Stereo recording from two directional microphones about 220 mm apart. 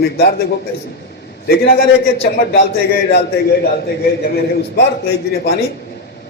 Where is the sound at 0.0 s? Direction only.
45° left (ahead or behind).